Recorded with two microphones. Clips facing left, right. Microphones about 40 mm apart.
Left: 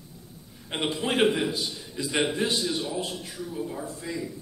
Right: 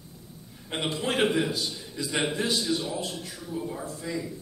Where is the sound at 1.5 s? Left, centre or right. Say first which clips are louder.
Even; centre.